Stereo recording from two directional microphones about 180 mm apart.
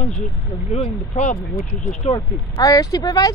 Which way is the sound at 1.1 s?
40° left (ahead or behind).